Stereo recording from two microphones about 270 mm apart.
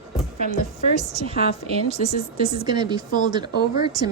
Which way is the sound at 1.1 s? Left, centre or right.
Right.